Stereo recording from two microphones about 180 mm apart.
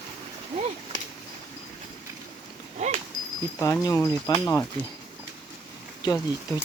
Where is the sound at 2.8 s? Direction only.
40° right (ahead or behind).